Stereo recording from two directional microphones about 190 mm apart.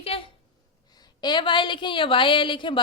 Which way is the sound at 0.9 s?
20° left (ahead or behind).